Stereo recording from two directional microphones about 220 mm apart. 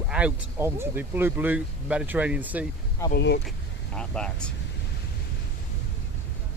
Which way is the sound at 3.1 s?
50° left (ahead or behind).